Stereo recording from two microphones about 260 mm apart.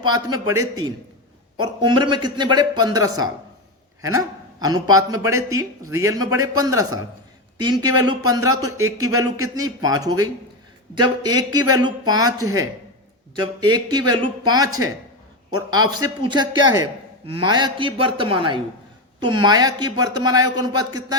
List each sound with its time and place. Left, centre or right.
0.0 s a man's voice: centre